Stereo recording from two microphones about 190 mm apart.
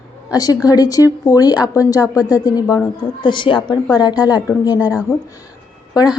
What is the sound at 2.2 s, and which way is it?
A woman's voice, 20° left (ahead or behind).